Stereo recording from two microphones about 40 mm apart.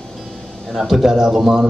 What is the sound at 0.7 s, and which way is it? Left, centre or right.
Speech, centre.